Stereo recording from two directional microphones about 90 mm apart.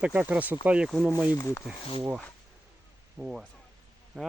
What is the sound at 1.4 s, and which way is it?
Speech, 30° left (ahead or behind).